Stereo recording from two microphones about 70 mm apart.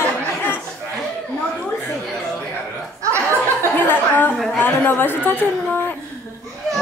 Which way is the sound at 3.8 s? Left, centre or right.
Left.